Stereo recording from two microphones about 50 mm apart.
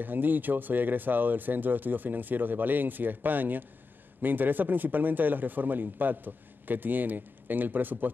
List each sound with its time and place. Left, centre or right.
0.0 s speech: right